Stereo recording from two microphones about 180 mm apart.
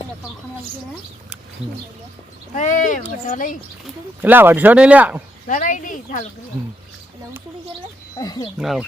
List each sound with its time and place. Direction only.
2.6 s speech: 45° left (ahead or behind)
4.2 s speech: 10° right (ahead or behind)
5.5 s speech: 45° left (ahead or behind)
8.2 s speech: 20° left (ahead or behind)
8.5 s speech: centre (ahead or behind)